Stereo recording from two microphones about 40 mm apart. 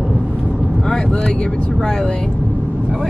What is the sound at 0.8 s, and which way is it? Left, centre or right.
Vehicle, left.